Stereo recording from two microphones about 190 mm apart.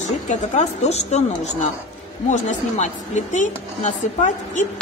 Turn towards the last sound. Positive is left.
turn(degrees=40)  # may be behind; listen again after turning